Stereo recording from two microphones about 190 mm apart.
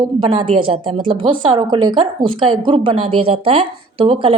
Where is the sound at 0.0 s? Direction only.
25° right (ahead or behind).